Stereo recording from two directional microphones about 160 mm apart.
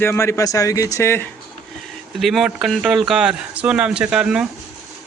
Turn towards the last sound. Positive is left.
turn(degrees=-5)  # may be behind; listen again after turning